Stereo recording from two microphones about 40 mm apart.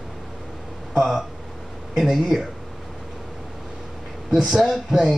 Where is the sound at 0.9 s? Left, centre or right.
Centre.